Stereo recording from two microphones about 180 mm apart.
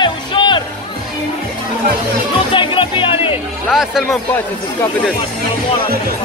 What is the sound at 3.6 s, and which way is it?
Music, centre (ahead or behind).